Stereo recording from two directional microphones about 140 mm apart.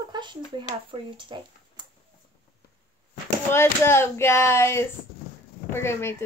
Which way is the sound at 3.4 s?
15° left (ahead or behind).